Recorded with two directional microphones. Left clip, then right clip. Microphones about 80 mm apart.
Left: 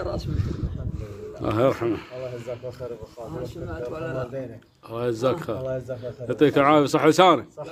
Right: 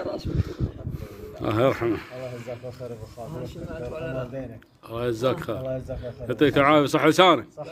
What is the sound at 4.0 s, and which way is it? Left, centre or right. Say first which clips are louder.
Speech: left 1 dB; left.